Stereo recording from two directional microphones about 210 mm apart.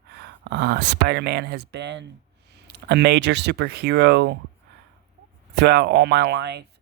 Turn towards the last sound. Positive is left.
turn(degrees=-55)  # may be behind; listen again after turning